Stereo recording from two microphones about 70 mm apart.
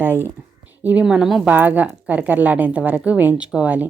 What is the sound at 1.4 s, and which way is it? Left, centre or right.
A woman's voice, right.